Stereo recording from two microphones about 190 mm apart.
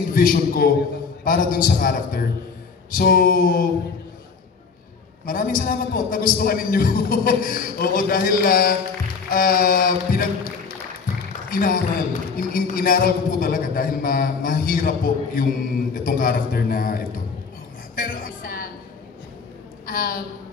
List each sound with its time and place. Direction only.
0.1 s a man's voice: 50° left (ahead or behind)
5.2 s a man's voice: 50° left (ahead or behind)
11.5 s a man's voice: 50° left (ahead or behind)
17.9 s music: 50° left (ahead or behind)
19.9 s a man's voice: 50° left (ahead or behind)